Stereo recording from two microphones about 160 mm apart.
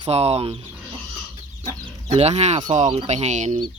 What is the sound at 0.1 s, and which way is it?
Speech, 40° right (ahead or behind).